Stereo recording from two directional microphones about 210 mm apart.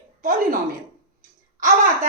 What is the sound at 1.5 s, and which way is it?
Speech, 35° right (ahead or behind).